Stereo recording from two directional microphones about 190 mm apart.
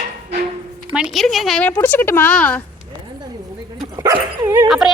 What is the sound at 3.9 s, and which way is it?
Speech, 15° right (ahead or behind).